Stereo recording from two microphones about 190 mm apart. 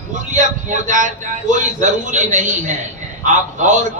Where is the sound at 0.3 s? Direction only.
40° right (ahead or behind).